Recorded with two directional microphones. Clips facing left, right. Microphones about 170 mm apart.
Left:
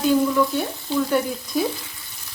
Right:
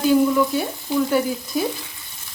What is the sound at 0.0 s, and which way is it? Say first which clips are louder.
Frying: right 2 dB; 5° right (ahead or behind).